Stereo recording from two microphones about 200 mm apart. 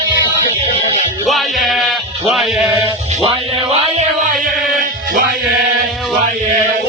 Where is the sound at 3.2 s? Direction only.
30° right (ahead or behind).